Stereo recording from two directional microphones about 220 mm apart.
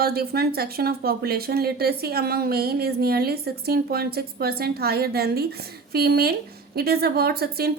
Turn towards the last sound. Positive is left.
turn(degrees=-45)  # may be behind; listen again after turning